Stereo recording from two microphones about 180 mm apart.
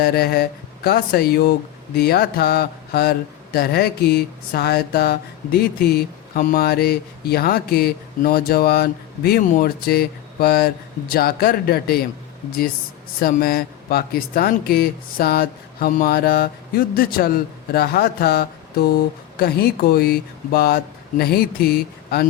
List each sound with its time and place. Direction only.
0.0 s speech: 60° left (ahead or behind)
13.1 s speech: 55° left (ahead or behind)